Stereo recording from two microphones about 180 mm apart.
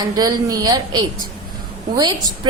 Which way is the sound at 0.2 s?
20° right (ahead or behind).